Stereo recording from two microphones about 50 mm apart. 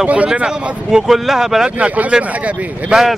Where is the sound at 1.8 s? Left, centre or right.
Right.